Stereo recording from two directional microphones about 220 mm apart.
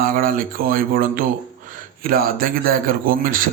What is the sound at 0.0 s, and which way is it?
A man's voice, 40° right (ahead or behind).